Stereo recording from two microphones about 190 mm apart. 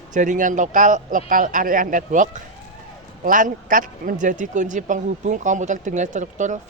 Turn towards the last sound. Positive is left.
turn(degrees=-40)  # may be behind; listen again after turning